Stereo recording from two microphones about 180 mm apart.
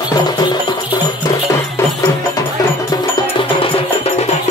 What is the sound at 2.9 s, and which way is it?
Music, 30° left (ahead or behind).